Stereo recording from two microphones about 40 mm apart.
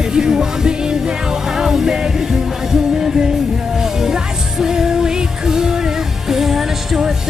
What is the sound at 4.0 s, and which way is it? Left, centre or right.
Music, centre.